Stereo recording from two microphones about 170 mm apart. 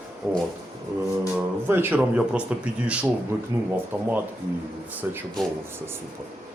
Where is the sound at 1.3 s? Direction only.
10° right (ahead or behind).